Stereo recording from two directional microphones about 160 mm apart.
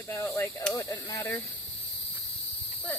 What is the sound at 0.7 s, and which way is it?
Speech, 15° left (ahead or behind).